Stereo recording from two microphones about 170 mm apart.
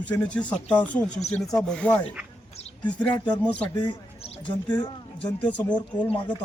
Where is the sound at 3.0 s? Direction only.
5° left (ahead or behind).